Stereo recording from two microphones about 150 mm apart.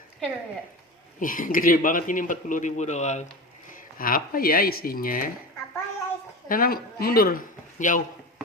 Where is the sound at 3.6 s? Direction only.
65° left (ahead or behind).